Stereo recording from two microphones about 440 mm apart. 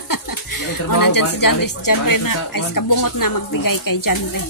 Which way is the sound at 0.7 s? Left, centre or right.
Left.